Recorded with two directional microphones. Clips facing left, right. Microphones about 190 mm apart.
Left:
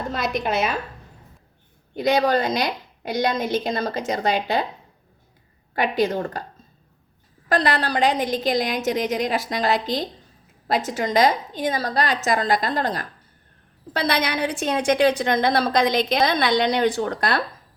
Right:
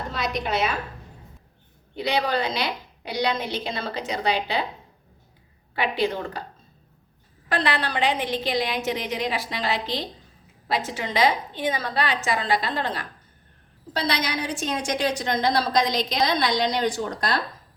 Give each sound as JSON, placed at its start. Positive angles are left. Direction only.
{"t": 0.1, "sound": "a sound", "side_deg": 50}
{"t": 2.0, "sound": "a woman's voice", "side_deg": 45}
{"t": 5.7, "sound": "a woman's voice", "side_deg": 45}
{"t": 7.4, "sound": "a woman's voice", "side_deg": 40}
{"t": 13.9, "sound": "a woman's voice", "side_deg": 55}